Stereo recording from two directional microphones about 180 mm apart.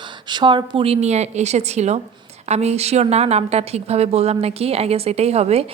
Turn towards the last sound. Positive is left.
turn(degrees=-35)  # may be behind; listen again after turning